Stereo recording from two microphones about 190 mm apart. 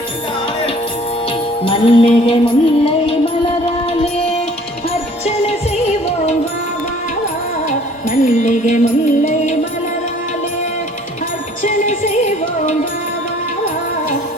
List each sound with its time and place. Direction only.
1.6 s music: 30° left (ahead or behind)
7.7 s music: 40° left (ahead or behind)
11.6 s music: 40° left (ahead or behind)